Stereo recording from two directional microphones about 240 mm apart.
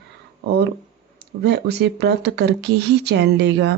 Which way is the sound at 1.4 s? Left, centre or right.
Right.